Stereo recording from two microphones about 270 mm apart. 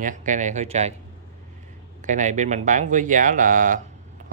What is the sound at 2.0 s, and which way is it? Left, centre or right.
Speech, right.